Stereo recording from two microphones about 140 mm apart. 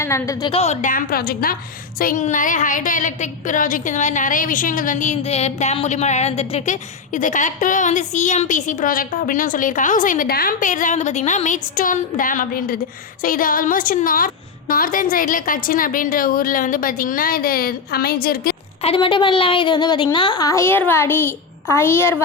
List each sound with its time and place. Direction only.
0.0 s a woman's voice: 20° left (ahead or behind)
0.5 s a woman's voice: 50° left (ahead or behind); by 1.5 s 90° left
2.0 s a woman's voice: 75° left (ahead or behind)
18.8 s a woman's voice: 40° left (ahead or behind); by 22.2 s 15° left (ahead or behind)